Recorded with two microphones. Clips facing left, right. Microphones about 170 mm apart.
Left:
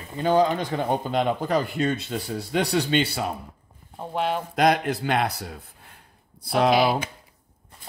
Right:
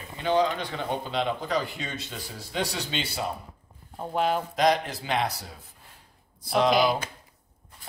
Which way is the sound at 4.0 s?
Centre (ahead or behind).